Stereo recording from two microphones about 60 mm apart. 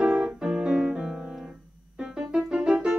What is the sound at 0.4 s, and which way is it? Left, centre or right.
Piano, centre.